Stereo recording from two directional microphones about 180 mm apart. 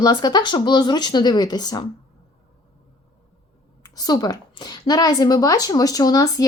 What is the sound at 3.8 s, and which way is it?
A woman's voice, 20° left (ahead or behind).